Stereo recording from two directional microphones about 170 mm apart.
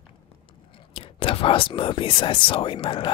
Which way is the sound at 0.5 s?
30° left (ahead or behind).